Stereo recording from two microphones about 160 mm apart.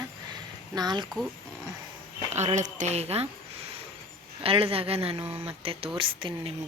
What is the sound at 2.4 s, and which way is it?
Speech, 45° right (ahead or behind).